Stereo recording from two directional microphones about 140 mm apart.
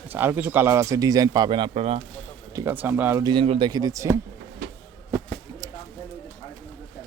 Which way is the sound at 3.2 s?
40° right (ahead or behind).